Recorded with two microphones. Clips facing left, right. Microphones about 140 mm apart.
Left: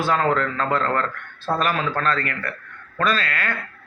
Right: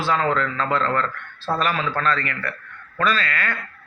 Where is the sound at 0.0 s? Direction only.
50° left (ahead or behind).